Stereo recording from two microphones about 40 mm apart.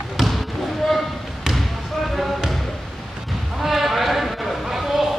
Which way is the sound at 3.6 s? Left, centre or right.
Centre.